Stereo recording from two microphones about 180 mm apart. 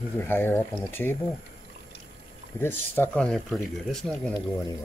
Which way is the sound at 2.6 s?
10° left (ahead or behind).